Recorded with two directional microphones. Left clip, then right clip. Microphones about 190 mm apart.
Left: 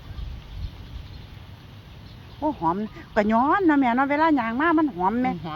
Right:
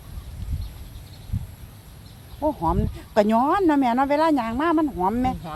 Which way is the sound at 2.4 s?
20° right (ahead or behind).